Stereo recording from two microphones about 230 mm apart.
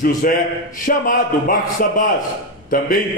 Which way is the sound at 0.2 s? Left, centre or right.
Left.